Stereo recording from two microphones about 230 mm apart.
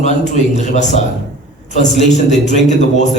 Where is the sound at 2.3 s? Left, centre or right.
Left.